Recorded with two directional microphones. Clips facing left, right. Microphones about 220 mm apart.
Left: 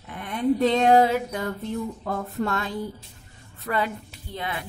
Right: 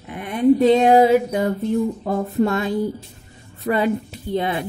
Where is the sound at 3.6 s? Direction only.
20° right (ahead or behind).